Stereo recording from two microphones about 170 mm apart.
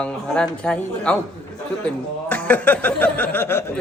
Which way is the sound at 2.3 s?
10° left (ahead or behind).